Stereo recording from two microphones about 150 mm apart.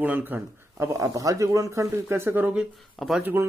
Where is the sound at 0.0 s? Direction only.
15° right (ahead or behind).